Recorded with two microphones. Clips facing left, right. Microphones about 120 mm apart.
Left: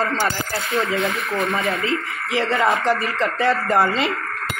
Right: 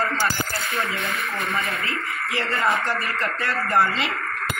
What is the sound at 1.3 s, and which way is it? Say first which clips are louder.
Speech: left 6 dB; 60° left (ahead or behind).